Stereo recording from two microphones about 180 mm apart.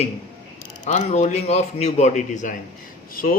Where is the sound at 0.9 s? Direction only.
40° left (ahead or behind).